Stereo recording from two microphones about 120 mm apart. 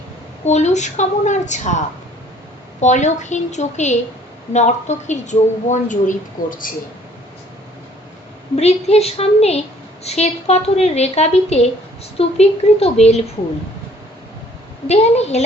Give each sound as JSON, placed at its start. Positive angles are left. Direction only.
{"t": 0.4, "sound": "a woman's voice", "side_deg": 75}
{"t": 2.8, "sound": "a woman's voice", "side_deg": 80}
{"t": 8.5, "sound": "a woman's voice", "side_deg": 65}
{"t": 14.8, "sound": "a woman's voice", "side_deg": 65}